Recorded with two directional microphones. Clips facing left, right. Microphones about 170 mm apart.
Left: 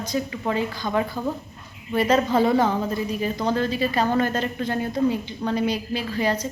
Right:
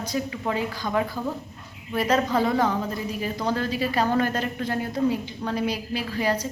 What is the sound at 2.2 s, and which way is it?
Speech, 25° left (ahead or behind).